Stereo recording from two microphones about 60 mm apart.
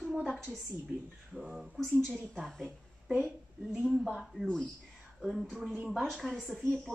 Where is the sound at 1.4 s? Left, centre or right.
Centre.